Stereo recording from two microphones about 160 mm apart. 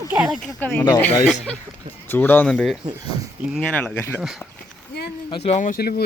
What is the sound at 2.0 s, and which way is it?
A woman's voice, 10° left (ahead or behind).